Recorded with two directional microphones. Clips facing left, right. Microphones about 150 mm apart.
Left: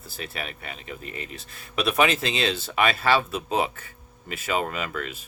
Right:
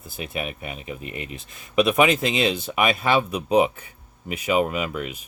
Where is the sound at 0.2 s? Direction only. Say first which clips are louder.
Right 5 dB; 15° right (ahead or behind).